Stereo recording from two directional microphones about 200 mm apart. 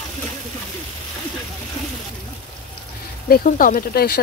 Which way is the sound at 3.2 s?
45° left (ahead or behind).